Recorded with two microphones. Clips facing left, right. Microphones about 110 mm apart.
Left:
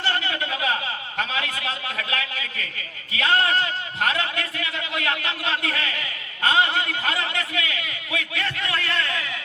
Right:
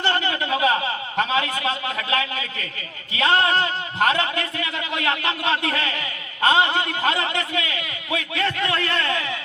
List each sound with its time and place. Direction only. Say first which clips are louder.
0.0 s a man's voice: right 3 dB; 30° right (ahead or behind)